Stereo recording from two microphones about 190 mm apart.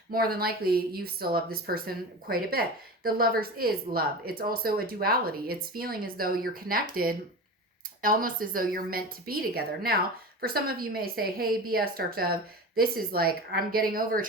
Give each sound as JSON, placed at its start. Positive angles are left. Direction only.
{"t": 0.1, "sound": "speech", "side_deg": -50}